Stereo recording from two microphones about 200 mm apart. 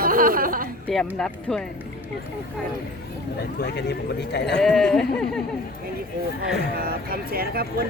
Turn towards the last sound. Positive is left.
turn(degrees=-50)  # may be behind; listen again after turning